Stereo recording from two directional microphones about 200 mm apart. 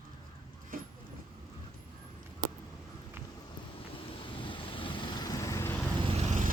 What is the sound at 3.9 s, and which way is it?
Vehicle, 25° left (ahead or behind).